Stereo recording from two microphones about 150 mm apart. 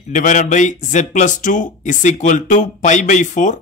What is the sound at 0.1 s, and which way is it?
Speech, 55° left (ahead or behind).